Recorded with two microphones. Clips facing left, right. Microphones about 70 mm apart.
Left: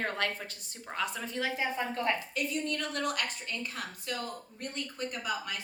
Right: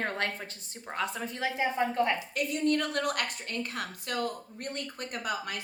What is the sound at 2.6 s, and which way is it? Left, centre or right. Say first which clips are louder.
A woman's voice: right 5 dB; right.